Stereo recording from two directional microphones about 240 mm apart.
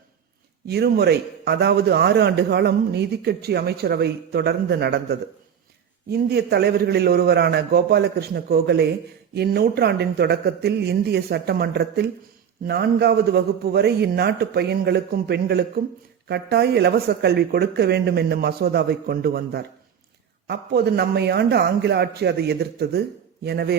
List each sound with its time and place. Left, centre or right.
0.7 s a man's voice: right